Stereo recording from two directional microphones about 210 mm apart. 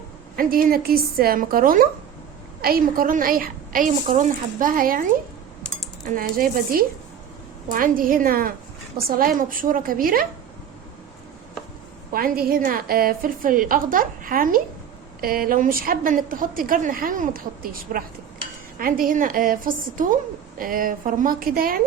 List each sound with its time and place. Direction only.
0.3 s a woman's voice: 45° right (ahead or behind)
6.1 s a woman's voice: 45° right (ahead or behind)
12.1 s a woman's voice: 45° right (ahead or behind)